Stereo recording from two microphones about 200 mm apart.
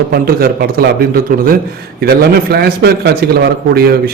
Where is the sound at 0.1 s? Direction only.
45° right (ahead or behind).